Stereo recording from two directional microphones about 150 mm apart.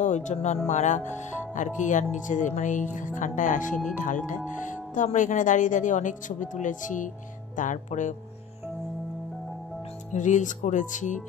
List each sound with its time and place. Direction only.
0.0 s speech: 50° left (ahead or behind)
10.1 s speech: 55° left (ahead or behind)